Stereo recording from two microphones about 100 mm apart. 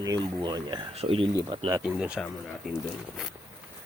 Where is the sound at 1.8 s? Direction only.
10° right (ahead or behind).